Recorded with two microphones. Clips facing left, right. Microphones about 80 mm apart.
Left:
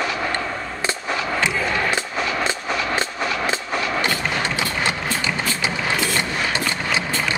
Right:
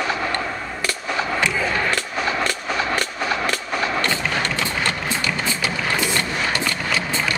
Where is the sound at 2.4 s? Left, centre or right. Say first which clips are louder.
Even; left.